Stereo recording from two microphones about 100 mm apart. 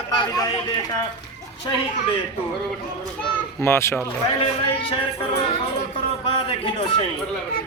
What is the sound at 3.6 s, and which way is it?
Speech, 25° left (ahead or behind).